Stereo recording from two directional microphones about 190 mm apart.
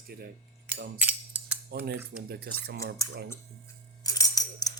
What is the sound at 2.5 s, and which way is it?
Speech, 60° right (ahead or behind).